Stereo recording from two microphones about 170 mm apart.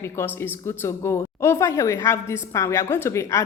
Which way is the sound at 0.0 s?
15° left (ahead or behind).